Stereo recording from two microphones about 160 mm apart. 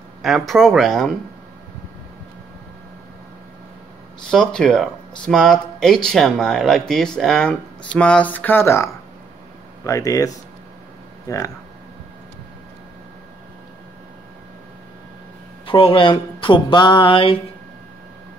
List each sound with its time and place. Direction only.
0.2 s speech: centre (ahead or behind)
4.3 s speech: 5° left (ahead or behind); by 11.5 s 20° left (ahead or behind)
15.6 s speech: 35° left (ahead or behind)